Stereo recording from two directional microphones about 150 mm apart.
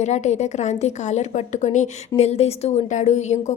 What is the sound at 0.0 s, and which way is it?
A woman's voice, 50° left (ahead or behind).